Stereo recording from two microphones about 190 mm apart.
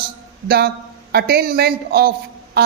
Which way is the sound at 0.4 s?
55° right (ahead or behind).